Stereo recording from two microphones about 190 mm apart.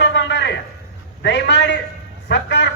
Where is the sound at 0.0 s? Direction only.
65° left (ahead or behind).